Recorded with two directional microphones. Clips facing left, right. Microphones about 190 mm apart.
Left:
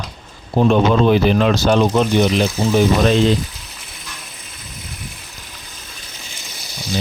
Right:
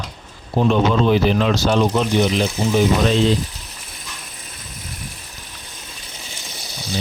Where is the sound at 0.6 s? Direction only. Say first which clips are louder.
Left 3 dB; 55° left (ahead or behind).